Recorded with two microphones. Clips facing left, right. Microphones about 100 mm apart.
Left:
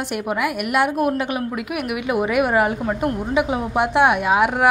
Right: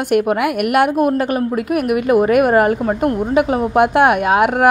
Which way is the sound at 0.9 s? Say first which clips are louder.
Right 5 dB; 40° right (ahead or behind).